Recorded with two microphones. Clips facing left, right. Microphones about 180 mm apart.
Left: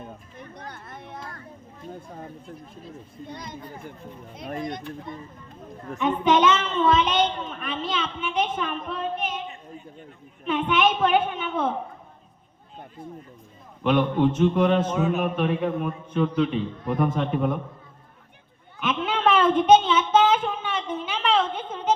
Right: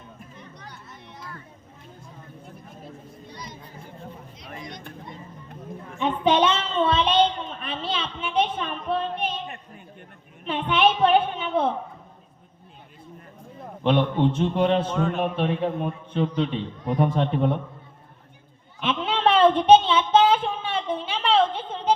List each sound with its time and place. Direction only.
0.6 s a sound: 55° left (ahead or behind)
3.2 s speech: 55° left (ahead or behind)
6.0 s a woman's voice: 30° right (ahead or behind)
10.4 s a woman's voice: 30° right (ahead or behind)
13.8 s a woman's voice: 30° right (ahead or behind)
14.9 s speech: 5° left (ahead or behind)
15.4 s a woman's voice: 30° right (ahead or behind)
18.8 s a sound: 30° right (ahead or behind)